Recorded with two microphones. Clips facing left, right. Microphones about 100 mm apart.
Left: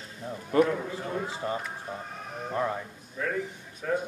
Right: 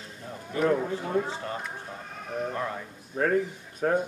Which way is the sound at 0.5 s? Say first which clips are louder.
Left 4 dB; 65° left (ahead or behind).